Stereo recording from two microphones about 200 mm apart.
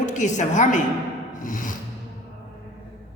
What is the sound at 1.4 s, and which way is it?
Music, 40° left (ahead or behind).